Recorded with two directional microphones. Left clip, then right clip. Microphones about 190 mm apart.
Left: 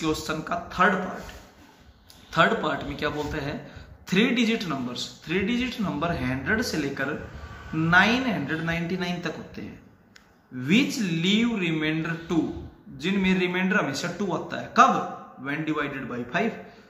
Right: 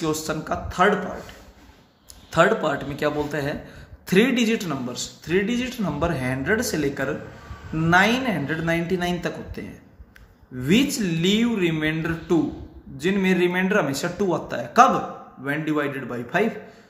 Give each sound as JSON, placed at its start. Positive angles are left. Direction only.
{"t": 0.0, "sound": "a man's voice", "side_deg": -45}
{"t": 2.3, "sound": "a man's voice", "side_deg": -45}
{"t": 10.6, "sound": "a man's voice", "side_deg": -50}